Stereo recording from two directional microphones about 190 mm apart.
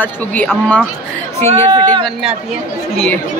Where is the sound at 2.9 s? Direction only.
5° left (ahead or behind).